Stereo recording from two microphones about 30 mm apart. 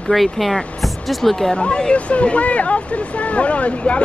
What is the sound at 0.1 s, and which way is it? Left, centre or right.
Speech, centre.